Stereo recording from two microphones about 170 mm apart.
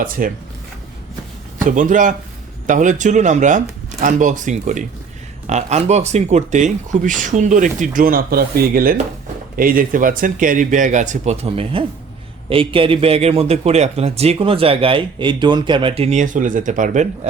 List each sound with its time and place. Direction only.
0.2 s speech: 55° right (ahead or behind)
1.6 s a man's voice: 50° right (ahead or behind)